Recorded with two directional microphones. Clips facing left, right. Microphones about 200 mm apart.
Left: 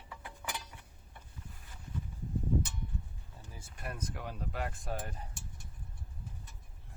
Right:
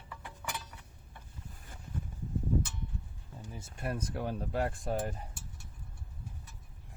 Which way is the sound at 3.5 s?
25° right (ahead or behind).